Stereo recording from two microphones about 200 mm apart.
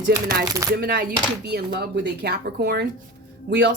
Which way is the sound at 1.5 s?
55° right (ahead or behind).